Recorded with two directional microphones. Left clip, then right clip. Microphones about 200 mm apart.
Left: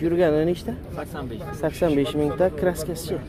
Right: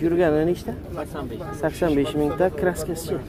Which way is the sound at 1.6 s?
15° left (ahead or behind).